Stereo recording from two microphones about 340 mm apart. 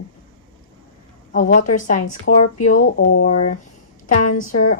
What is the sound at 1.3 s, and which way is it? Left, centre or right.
A woman's voice, left.